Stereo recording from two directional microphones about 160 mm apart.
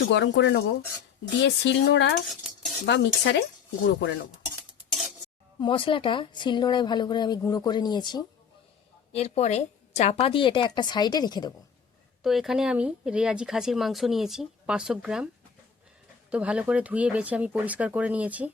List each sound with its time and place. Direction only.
0.1 s speech: 90° left
2.2 s cutlery: centre (ahead or behind)
2.8 s speech: 90° left
4.9 s stir: centre (ahead or behind)
5.5 s speech: 30° left (ahead or behind)
9.1 s a woman's voice: 40° left (ahead or behind); by 11.5 s 25° left (ahead or behind)
12.2 s speech: centre (ahead or behind)
16.3 s speech: 5° right (ahead or behind)